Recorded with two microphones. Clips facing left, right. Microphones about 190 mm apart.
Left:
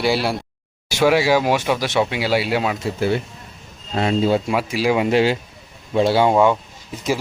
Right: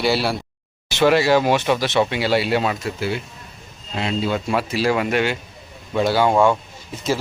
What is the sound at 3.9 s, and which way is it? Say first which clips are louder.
Speech: left 5 dB; 50° left (ahead or behind).